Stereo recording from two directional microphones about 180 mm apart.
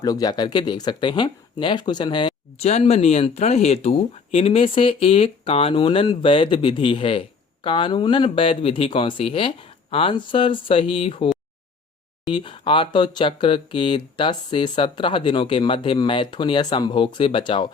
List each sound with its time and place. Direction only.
0.0 s speech: 20° left (ahead or behind)